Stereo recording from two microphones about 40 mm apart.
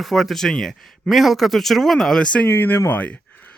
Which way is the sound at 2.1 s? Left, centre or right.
Left.